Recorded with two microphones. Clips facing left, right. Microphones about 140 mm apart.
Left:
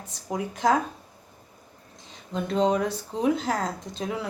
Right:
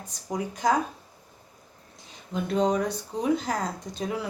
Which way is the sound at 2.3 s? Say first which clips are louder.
Left 1 dB; centre (ahead or behind).